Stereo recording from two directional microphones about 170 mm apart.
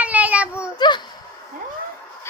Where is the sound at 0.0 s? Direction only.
10° right (ahead or behind).